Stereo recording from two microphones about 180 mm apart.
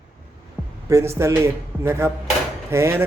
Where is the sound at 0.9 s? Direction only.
15° right (ahead or behind).